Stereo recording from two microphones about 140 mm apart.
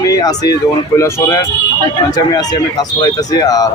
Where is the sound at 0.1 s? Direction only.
25° left (ahead or behind).